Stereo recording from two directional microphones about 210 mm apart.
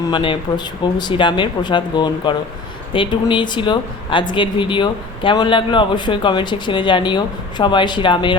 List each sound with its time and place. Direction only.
0.1 s speech: 20° left (ahead or behind)